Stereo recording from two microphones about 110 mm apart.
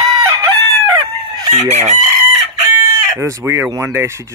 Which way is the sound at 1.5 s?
90° right.